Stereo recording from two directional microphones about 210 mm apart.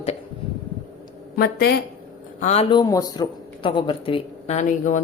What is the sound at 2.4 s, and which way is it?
Speech, 35° left (ahead or behind).